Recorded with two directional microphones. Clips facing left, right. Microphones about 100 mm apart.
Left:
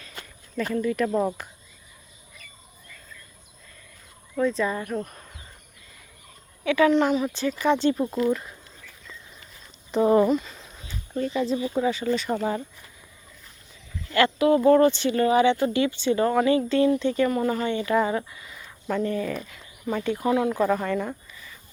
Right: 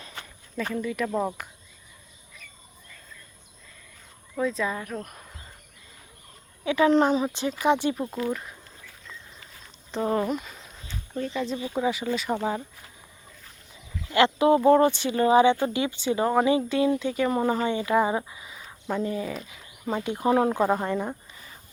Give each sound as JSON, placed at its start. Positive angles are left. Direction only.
{"t": 0.5, "sound": "speech", "side_deg": 0}
{"t": 4.4, "sound": "speech", "side_deg": 0}
{"t": 6.7, "sound": "speech", "side_deg": -25}
{"t": 7.3, "sound": "speech", "side_deg": -20}
{"t": 7.9, "sound": "speech", "side_deg": 0}
{"t": 9.9, "sound": "speech", "side_deg": 10}
{"t": 10.2, "sound": "speech", "side_deg": -5}
{"t": 11.7, "sound": "speech", "side_deg": -10}
{"t": 14.1, "sound": "speech", "side_deg": -20}
{"t": 17.2, "sound": "speech", "side_deg": -20}